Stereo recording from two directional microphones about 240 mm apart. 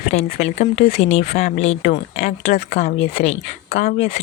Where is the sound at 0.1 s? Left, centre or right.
Left.